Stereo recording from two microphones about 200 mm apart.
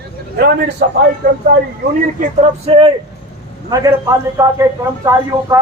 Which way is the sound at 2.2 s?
30° right (ahead or behind).